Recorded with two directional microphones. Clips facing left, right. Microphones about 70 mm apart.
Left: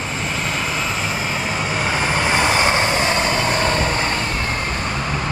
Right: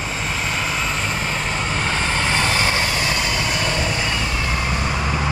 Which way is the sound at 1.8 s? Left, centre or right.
Centre.